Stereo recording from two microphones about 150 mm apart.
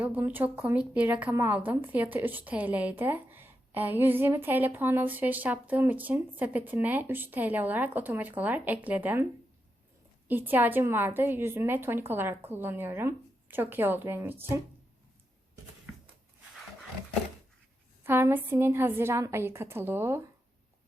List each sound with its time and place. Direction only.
0.0 s a woman's voice: 10° right (ahead or behind)
10.2 s a woman's voice: 10° right (ahead or behind)
18.0 s a woman's voice: 15° right (ahead or behind)